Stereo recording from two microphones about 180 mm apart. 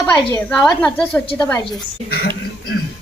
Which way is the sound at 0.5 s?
5° left (ahead or behind).